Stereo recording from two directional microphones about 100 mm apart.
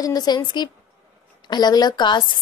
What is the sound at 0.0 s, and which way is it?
A woman's voice, 40° left (ahead or behind).